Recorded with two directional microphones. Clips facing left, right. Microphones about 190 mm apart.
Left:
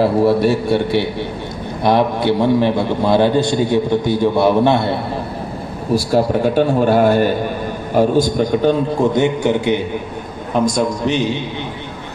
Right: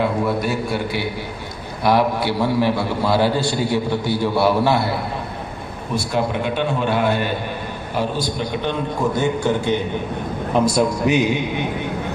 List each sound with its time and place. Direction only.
0.0 s a man's voice: 30° left (ahead or behind)
5.9 s a man's voice: 35° left (ahead or behind)
9.1 s a man's voice: 20° left (ahead or behind)
10.7 s a man's voice: 5° right (ahead or behind)